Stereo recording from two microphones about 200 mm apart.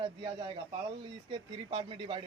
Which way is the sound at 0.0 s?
25° right (ahead or behind).